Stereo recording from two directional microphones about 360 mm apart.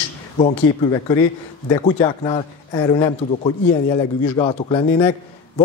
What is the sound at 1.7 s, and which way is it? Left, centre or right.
Speech, centre.